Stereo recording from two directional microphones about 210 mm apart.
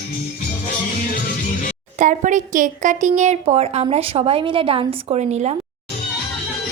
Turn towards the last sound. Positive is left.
turn(degrees=-30)  # may be behind; listen again after turning